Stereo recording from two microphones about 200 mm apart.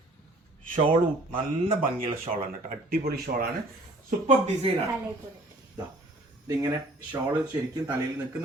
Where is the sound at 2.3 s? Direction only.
45° right (ahead or behind).